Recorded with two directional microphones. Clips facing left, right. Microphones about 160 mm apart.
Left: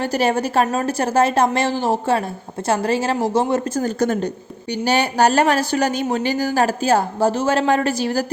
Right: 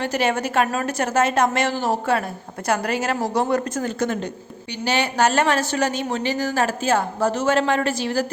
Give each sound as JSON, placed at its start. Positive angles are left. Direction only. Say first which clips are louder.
{"t": 0.0, "sound": "a woman's voice", "louder": "left 3 dB", "side_deg": 35}
{"t": 3.8, "sound": "a woman's voice", "louder": "left 4 dB", "side_deg": 40}